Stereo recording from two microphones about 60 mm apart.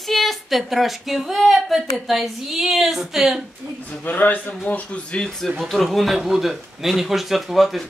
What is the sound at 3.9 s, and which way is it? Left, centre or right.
Speech, left.